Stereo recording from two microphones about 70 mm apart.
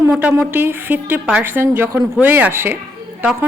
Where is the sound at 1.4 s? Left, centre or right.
Right.